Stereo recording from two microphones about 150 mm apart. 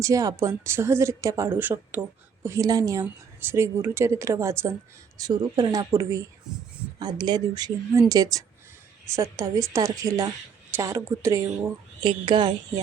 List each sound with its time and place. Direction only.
0.0 s speech: 20° right (ahead or behind)
12.0 s a woman's voice: 30° right (ahead or behind)